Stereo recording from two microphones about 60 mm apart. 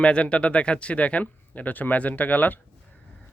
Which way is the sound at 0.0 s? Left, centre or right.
Centre.